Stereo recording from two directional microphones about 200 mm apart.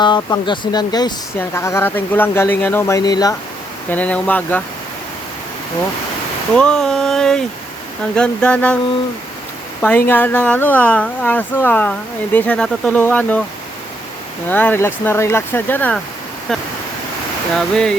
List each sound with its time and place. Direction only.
0.0 s speech: 25° left (ahead or behind)
3.8 s speech: 5° left (ahead or behind)
6.5 s speech: 5° left (ahead or behind)
9.8 s speech: 10° left (ahead or behind)
14.5 s speech: 10° left (ahead or behind)
16.5 s waterfall: centre (ahead or behind)